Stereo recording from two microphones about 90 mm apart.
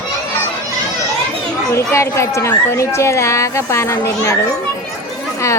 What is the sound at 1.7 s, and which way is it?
Speech, 30° left (ahead or behind).